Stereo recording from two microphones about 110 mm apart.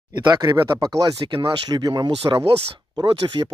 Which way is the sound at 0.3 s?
40° right (ahead or behind).